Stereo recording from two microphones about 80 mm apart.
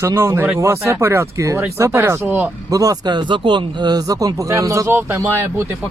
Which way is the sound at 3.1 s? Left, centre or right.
Right.